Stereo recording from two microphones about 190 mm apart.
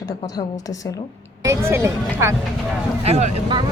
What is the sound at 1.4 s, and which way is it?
Speech, 15° right (ahead or behind).